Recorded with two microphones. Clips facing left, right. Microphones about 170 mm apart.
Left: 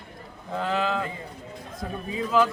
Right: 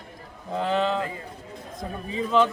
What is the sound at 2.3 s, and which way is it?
Speech, 5° left (ahead or behind).